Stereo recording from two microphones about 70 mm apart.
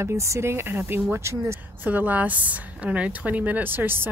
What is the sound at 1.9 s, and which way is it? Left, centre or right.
A woman's voice, right.